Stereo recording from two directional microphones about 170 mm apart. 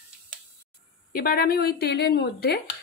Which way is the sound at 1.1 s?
60° left (ahead or behind).